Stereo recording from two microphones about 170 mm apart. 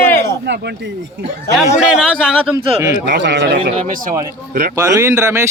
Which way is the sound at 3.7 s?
50° right (ahead or behind).